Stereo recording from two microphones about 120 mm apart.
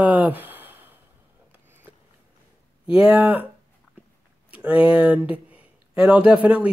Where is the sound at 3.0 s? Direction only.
15° right (ahead or behind).